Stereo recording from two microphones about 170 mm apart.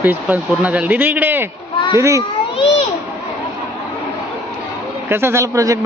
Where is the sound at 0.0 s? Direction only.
10° right (ahead or behind).